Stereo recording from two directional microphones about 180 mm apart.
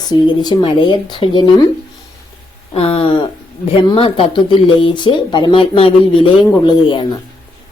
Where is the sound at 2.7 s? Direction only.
30° left (ahead or behind).